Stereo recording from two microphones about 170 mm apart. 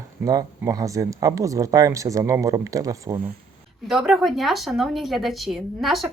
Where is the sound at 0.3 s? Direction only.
20° right (ahead or behind).